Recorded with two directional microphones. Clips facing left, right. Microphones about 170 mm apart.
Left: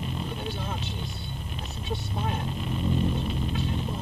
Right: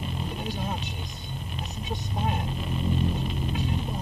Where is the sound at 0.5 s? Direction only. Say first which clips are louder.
Right 1 dB; 15° right (ahead or behind).